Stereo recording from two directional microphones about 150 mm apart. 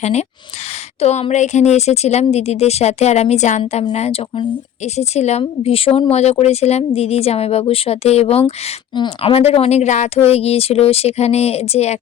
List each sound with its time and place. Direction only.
0.0 s speech: 50° left (ahead or behind)